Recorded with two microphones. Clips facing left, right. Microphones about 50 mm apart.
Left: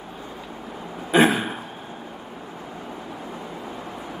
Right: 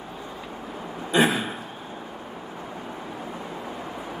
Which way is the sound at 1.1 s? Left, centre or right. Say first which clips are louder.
Left 3 dB; left.